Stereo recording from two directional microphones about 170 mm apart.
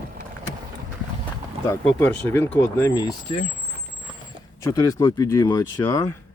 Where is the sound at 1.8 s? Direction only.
10° left (ahead or behind).